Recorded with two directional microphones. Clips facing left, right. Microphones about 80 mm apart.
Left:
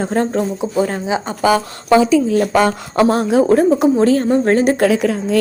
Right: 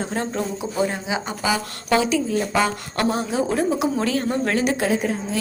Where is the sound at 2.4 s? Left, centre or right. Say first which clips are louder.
Left 7 dB; left.